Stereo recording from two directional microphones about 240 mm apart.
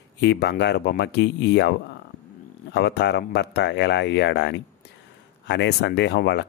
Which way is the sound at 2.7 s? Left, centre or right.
Left.